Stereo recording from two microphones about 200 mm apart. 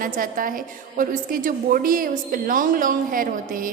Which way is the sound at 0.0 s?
45° right (ahead or behind).